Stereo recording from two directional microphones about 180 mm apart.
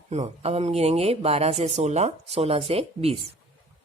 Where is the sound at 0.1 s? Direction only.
35° right (ahead or behind).